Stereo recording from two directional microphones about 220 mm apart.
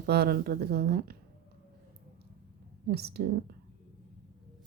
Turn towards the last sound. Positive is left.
turn(degrees=-45)  # may be behind; listen again after turning